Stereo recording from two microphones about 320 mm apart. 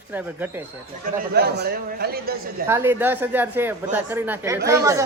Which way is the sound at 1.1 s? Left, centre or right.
Right.